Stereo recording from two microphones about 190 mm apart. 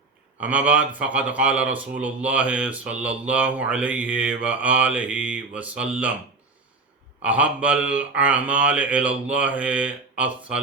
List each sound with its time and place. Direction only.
0.3 s a man's voice: 10° right (ahead or behind)
7.2 s a man's voice: 5° right (ahead or behind)